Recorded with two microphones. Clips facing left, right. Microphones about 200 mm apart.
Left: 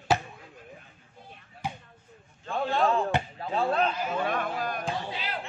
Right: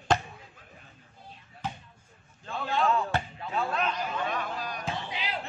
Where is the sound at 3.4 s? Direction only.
35° left (ahead or behind).